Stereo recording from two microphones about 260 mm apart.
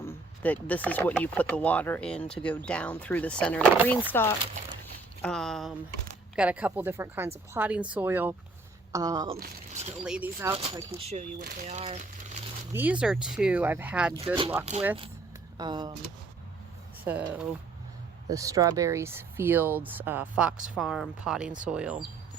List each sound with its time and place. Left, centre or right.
0.0 s speech: centre
10.0 s speech: centre
10.5 s speech: right
12.7 s speech: centre
14.7 s speech: right
15.5 s speech: centre
17.0 s speech: centre